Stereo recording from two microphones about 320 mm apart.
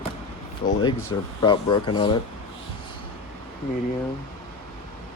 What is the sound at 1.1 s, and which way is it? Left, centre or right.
Speech, centre.